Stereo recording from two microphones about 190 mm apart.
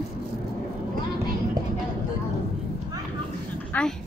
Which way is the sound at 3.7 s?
10° left (ahead or behind).